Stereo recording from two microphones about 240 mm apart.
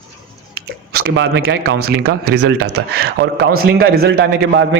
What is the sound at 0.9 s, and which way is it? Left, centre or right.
A man's voice, right.